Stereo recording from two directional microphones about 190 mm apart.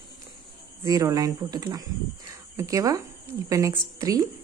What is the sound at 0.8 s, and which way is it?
Speech, 15° right (ahead or behind).